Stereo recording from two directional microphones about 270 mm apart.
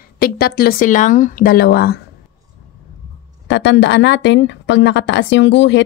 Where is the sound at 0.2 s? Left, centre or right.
Left.